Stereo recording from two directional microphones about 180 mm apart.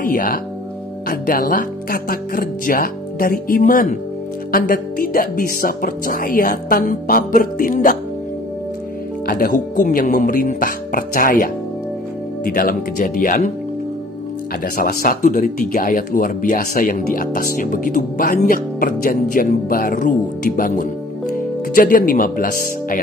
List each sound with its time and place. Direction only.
0.0 s speech: 50° left (ahead or behind)
9.2 s speech: 55° left (ahead or behind)
14.6 s speech: 55° left (ahead or behind)